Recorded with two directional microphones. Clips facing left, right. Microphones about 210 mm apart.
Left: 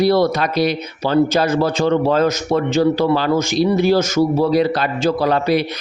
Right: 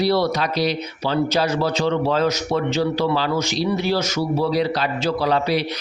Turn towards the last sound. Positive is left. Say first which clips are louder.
# left 4 dB
turn(degrees=50)  # may be behind; listen again after turning